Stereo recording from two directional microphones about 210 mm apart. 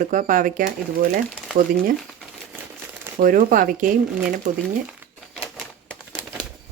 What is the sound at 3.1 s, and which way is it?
Speech, 40° right (ahead or behind).